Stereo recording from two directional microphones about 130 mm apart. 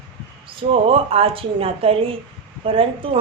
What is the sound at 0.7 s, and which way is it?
A woman's voice, 50° right (ahead or behind).